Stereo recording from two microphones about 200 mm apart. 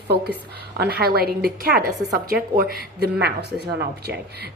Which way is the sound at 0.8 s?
50° right (ahead or behind).